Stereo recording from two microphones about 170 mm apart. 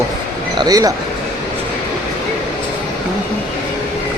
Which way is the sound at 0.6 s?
20° right (ahead or behind).